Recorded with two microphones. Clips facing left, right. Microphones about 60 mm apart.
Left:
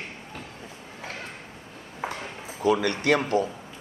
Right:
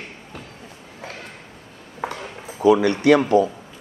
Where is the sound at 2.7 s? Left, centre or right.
Right.